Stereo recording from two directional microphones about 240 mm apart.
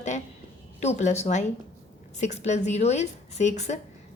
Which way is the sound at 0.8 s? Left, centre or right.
Left.